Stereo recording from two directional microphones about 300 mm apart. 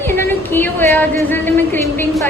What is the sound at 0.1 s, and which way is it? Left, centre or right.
A woman's voice, centre.